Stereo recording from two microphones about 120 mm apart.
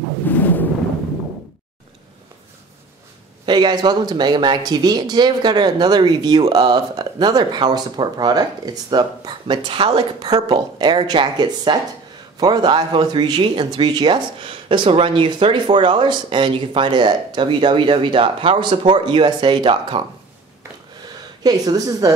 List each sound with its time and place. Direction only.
0.3 s a sound: 15° left (ahead or behind)
3.4 s speech: 35° right (ahead or behind)
21.4 s speech: 35° right (ahead or behind)